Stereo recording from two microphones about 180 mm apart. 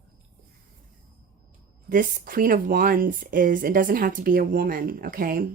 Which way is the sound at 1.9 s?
50° right (ahead or behind).